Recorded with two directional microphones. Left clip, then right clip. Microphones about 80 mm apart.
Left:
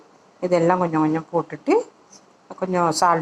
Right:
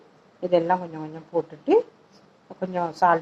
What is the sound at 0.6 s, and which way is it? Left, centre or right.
Speech, left.